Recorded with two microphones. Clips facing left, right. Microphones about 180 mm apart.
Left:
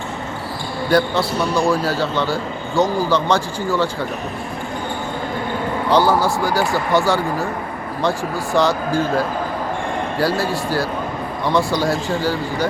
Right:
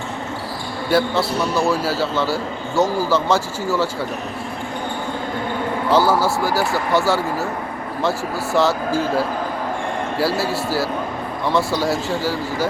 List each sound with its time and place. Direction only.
0.9 s a man's voice: 5° right (ahead or behind)
5.9 s a man's voice: 5° right (ahead or behind)
8.5 s a man's voice: 5° right (ahead or behind)